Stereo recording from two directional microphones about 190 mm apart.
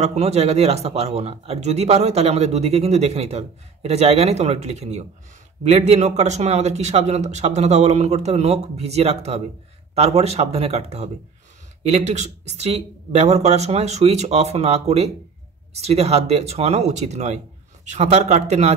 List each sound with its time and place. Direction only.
0.0 s speech: 35° right (ahead or behind)